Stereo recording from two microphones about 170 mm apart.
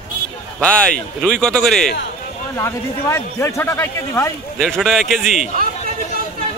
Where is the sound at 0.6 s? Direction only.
5° left (ahead or behind).